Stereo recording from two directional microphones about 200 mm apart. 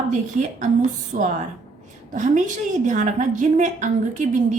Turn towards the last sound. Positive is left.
turn(degrees=-40)  # may be behind; listen again after turning